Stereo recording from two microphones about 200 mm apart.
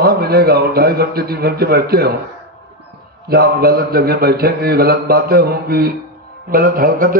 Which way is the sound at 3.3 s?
50° right (ahead or behind).